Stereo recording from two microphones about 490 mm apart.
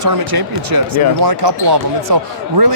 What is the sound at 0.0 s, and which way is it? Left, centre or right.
Speech, right.